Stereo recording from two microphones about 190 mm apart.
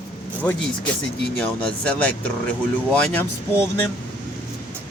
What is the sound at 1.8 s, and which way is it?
Speech, 5° left (ahead or behind).